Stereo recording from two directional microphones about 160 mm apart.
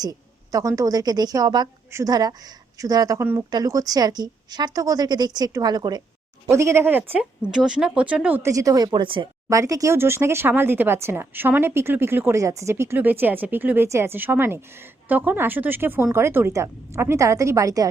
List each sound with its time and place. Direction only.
0.0 s a woman's voice: 25° right (ahead or behind)
9.5 s speech: 20° right (ahead or behind)